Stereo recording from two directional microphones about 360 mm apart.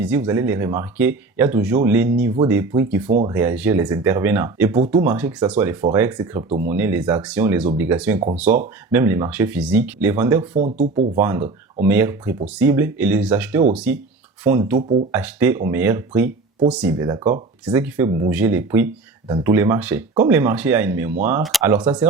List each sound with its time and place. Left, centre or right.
0.0 s speech: centre
3.1 s speech: centre
3.3 s speech: centre
10.5 s speech: centre
11.2 s speech: centre